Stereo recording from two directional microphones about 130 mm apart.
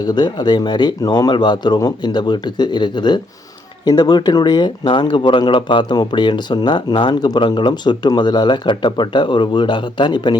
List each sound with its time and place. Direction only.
0.0 s speech: 35° left (ahead or behind)